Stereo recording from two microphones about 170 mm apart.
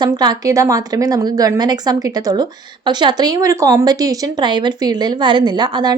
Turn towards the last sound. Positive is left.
turn(degrees=-25)  # may be behind; listen again after turning